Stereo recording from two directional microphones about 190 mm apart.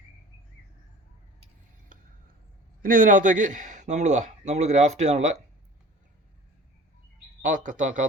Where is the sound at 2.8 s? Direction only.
45° right (ahead or behind).